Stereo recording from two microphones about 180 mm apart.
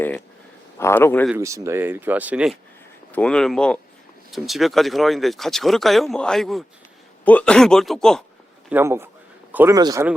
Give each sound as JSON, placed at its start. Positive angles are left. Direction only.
{"t": 0.8, "sound": "speech", "side_deg": 15}
{"t": 1.4, "sound": "speech", "side_deg": -15}
{"t": 3.1, "sound": "speech", "side_deg": 5}
{"t": 8.7, "sound": "a man's voice", "side_deg": -15}